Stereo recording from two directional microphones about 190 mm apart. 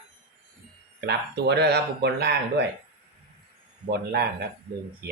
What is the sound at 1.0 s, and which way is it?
Speech, 60° right (ahead or behind).